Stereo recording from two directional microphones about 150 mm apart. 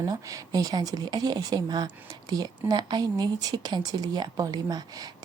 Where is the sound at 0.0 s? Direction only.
25° right (ahead or behind).